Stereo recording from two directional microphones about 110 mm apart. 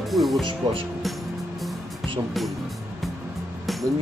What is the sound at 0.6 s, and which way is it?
Speech, 45° right (ahead or behind).